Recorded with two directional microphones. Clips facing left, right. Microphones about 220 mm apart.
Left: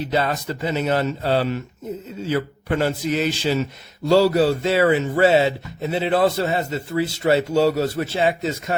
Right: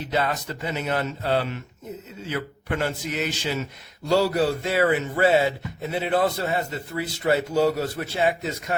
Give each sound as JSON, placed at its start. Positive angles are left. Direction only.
{"t": 0.1, "sound": "a man's voice", "side_deg": 35}